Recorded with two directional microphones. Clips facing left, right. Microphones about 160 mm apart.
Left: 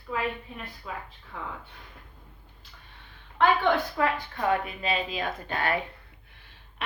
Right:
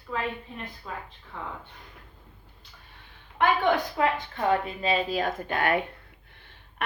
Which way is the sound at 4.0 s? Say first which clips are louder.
Right 1 dB; 25° right (ahead or behind).